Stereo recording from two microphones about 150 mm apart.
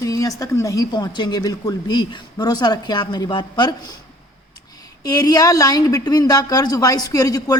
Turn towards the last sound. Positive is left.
turn(degrees=25)  # may be behind; listen again after turning